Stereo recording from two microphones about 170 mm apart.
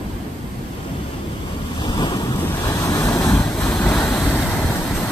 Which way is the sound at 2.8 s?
15° left (ahead or behind).